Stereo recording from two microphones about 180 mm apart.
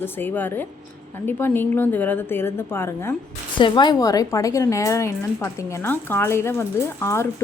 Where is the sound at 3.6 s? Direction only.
25° left (ahead or behind).